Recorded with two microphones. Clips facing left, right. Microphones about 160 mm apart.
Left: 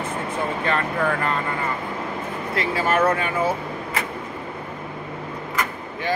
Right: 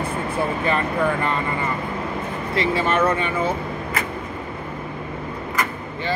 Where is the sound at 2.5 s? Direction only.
5° left (ahead or behind).